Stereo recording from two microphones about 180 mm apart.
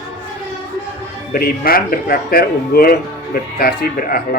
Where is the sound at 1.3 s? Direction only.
55° left (ahead or behind).